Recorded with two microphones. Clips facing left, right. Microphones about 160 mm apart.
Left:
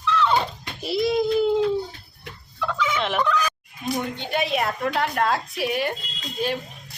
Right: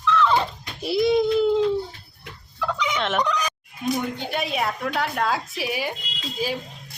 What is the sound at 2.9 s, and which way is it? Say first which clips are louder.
Fowl: even; centre (ahead or behind).